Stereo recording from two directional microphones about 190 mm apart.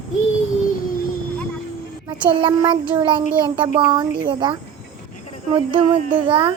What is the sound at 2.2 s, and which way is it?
Child singing, 25° right (ahead or behind).